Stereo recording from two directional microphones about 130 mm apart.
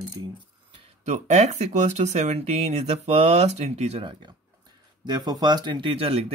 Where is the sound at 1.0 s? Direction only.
60° right (ahead or behind).